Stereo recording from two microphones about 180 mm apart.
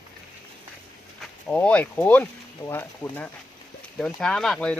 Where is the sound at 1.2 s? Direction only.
5° left (ahead or behind).